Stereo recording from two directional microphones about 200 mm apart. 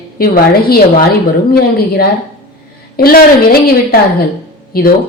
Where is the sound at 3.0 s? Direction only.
50° left (ahead or behind).